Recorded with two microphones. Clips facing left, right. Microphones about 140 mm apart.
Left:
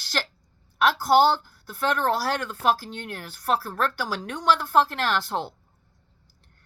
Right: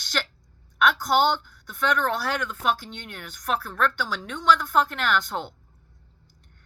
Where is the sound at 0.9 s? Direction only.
30° left (ahead or behind).